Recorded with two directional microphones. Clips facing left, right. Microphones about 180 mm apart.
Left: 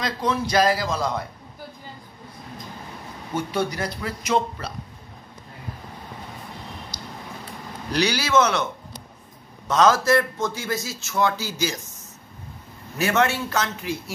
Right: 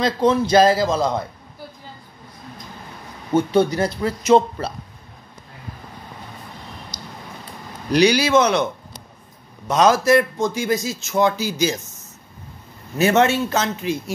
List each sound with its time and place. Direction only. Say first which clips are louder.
0.0 s a man's voice: right 7 dB; 25° right (ahead or behind)
3.3 s a man's voice: right 8 dB; 25° right (ahead or behind)
7.9 s a man's voice: right 6 dB; 15° right (ahead or behind)
9.7 s a man's voice: right 3 dB; 15° right (ahead or behind)
12.9 s a man's voice: right 5 dB; 25° right (ahead or behind)